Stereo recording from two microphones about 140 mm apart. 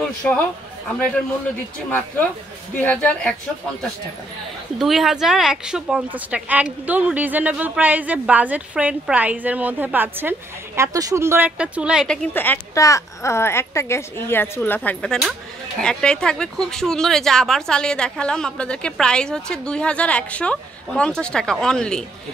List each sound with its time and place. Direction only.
1.9 s speech: 15° left (ahead or behind)
4.7 s a woman's voice: centre (ahead or behind)
10.8 s a woman's voice: 25° right (ahead or behind); by 12.1 s 5° right (ahead or behind)
12.1 s speech: 10° left (ahead or behind)